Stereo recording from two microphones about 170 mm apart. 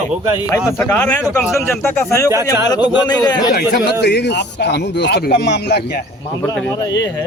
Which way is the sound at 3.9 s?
75° left (ahead or behind).